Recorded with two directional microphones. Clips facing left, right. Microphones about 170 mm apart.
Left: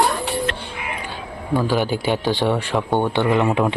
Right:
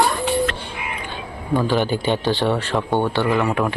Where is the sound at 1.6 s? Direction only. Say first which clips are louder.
Even; 5° left (ahead or behind).